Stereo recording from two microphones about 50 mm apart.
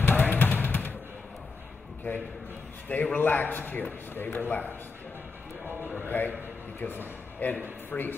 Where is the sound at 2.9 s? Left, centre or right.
Left.